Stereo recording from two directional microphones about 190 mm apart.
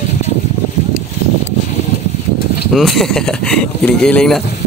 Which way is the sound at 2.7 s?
Centre (ahead or behind).